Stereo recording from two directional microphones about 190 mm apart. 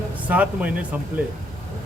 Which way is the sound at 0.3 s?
5° right (ahead or behind).